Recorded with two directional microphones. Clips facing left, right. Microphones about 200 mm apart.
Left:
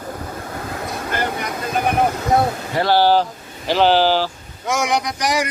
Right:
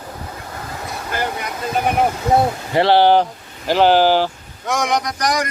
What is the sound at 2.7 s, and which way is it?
Speech, 25° right (ahead or behind).